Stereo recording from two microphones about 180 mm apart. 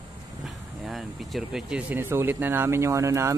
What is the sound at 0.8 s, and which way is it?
Speech, centre (ahead or behind).